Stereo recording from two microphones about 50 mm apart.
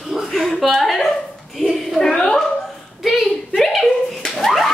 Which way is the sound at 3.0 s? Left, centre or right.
Centre.